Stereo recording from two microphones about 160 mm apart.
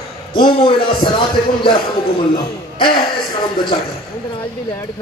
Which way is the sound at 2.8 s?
30° left (ahead or behind).